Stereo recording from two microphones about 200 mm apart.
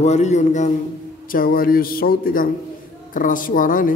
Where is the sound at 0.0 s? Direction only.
35° left (ahead or behind).